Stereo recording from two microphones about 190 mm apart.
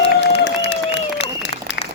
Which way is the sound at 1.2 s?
70° left (ahead or behind).